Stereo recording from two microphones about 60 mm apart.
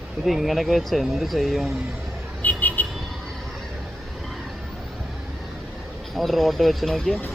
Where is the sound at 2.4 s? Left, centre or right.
Left.